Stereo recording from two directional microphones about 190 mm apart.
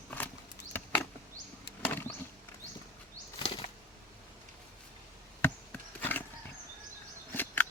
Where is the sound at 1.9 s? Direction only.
10° left (ahead or behind).